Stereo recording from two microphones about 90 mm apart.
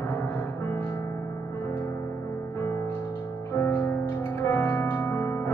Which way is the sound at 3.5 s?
25° left (ahead or behind).